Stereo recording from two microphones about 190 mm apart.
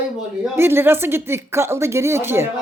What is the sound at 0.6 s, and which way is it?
A woman's voice, 10° right (ahead or behind).